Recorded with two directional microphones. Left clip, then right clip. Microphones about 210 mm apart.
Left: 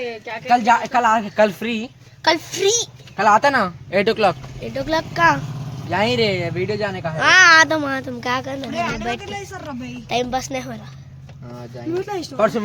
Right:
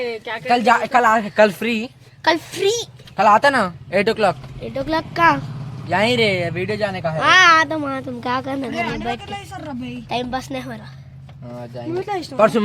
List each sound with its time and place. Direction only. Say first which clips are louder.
0.4 s speech: even; 50° right (ahead or behind); by 1.9 s 20° right (ahead or behind)
2.2 s a woman's voice: even; 10° right (ahead or behind); by 7.2 s 25° right (ahead or behind)
7.2 s a woman's voice: even; 5° right (ahead or behind)
7.5 s speech: left 3 dB; 15° left (ahead or behind)
8.2 s a woman's voice: right 1 dB; 10° right (ahead or behind)
8.4 s speech: right 2 dB; 30° right (ahead or behind)
10.1 s a woman's voice: left 3 dB; centre (ahead or behind)
12.4 s speech: right 3 dB; 45° right (ahead or behind)